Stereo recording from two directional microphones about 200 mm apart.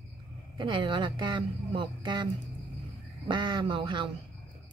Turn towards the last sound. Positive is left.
turn(degrees=-25)  # may be behind; listen again after turning